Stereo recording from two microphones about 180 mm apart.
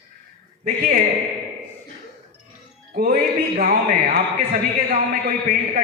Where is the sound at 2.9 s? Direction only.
55° right (ahead or behind).